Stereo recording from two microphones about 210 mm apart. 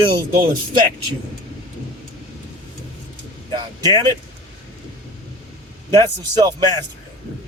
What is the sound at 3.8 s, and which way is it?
Speech, 20° right (ahead or behind).